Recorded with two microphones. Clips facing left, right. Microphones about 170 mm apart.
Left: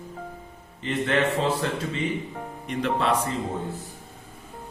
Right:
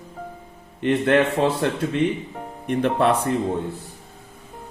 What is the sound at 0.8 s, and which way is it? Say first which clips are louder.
A man's voice: right 6 dB; 60° right (ahead or behind).